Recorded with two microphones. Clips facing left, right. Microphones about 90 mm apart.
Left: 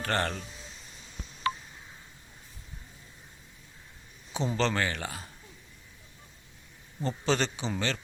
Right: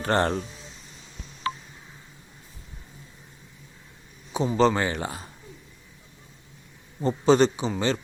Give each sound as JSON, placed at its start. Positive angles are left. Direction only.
{"t": 0.0, "sound": "speech", "side_deg": -25}
{"t": 4.4, "sound": "speech", "side_deg": -15}
{"t": 7.0, "sound": "a man's voice", "side_deg": -15}